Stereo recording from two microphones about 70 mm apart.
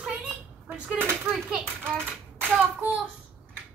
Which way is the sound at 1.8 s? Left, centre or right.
Right.